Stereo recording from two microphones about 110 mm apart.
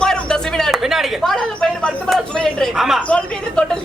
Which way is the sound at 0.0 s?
5° left (ahead or behind).